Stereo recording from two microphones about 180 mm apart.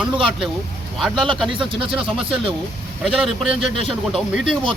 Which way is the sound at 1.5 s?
30° right (ahead or behind).